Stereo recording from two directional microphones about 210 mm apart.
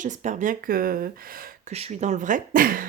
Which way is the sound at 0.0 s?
35° right (ahead or behind).